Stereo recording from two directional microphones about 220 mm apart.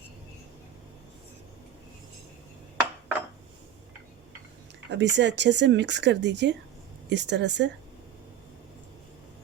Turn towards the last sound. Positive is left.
turn(degrees=-50)  # may be behind; listen again after turning